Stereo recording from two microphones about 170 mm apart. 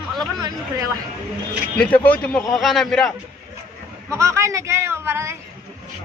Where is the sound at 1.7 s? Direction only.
10° left (ahead or behind).